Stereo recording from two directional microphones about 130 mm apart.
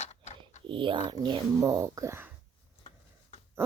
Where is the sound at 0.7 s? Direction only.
40° right (ahead or behind).